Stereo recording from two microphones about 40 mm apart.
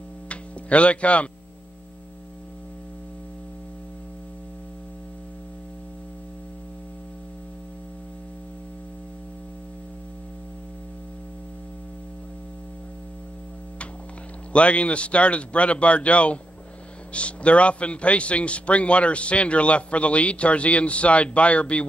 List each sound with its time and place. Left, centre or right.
0.3 s music: left
14.5 s a man's voice: left